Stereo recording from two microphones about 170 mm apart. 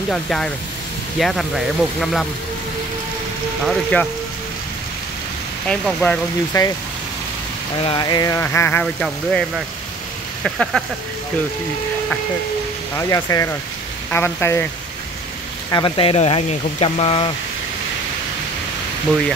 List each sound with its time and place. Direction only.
0.1 s speech: 5° left (ahead or behind)
3.6 s speech: 5° left (ahead or behind)
5.7 s speech: 5° left (ahead or behind)
6.5 s speech: 25° left (ahead or behind)
7.8 s speech: 25° left (ahead or behind); by 10.8 s centre (ahead or behind)
12.9 s speech: 20° left (ahead or behind)
15.7 s speech: 30° left (ahead or behind)